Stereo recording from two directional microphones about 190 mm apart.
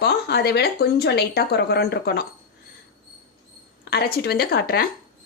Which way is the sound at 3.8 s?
55° left (ahead or behind).